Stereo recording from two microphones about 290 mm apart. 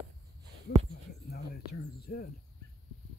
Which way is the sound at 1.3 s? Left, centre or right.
Left.